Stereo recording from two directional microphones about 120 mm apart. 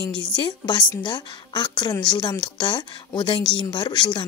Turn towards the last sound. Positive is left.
turn(degrees=40)  # may be behind; listen again after turning